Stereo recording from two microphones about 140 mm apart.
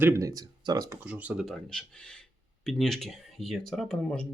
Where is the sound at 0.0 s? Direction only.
20° right (ahead or behind).